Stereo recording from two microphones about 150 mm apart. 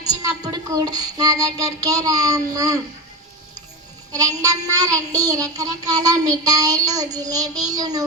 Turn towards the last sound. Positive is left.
turn(degrees=-25)  # may be behind; listen again after turning